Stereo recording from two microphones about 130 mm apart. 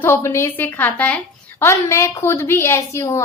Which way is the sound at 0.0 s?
20° left (ahead or behind).